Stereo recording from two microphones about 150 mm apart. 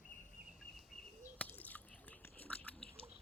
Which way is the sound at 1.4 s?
10° left (ahead or behind).